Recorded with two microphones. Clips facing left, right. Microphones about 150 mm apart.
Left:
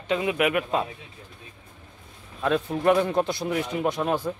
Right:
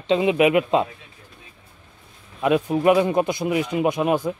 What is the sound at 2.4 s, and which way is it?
Speech, 15° right (ahead or behind).